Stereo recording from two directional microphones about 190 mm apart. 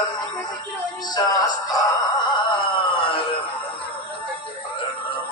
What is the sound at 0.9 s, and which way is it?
Speech, 20° left (ahead or behind).